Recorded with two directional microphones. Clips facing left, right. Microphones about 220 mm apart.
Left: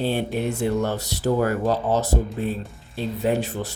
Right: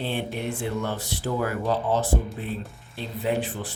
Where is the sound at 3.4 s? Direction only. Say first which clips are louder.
Left 3 dB; 40° left (ahead or behind).